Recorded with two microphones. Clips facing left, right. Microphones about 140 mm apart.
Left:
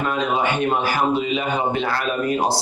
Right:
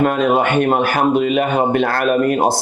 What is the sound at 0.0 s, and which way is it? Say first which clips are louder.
Speech: right 6 dB; 50° right (ahead or behind).